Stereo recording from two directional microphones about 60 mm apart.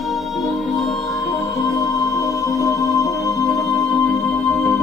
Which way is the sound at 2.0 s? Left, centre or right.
Left.